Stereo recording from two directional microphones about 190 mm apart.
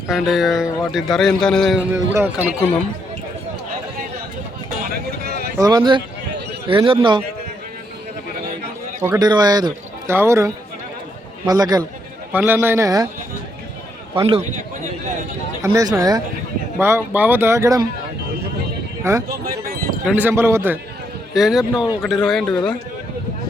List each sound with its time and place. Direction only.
0.1 s speech: centre (ahead or behind)
2.1 s speech: 10° right (ahead or behind)
5.5 s a man's voice: 20° right (ahead or behind)
9.0 s a man's voice: 20° right (ahead or behind)
12.3 s speech: 10° right (ahead or behind)
14.3 s a man's voice: 30° right (ahead or behind)
15.6 s a man's voice: 20° right (ahead or behind)
19.1 s speech: 15° right (ahead or behind)
21.3 s speech: centre (ahead or behind)